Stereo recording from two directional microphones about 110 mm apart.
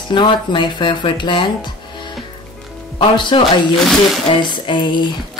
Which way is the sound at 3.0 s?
50° left (ahead or behind).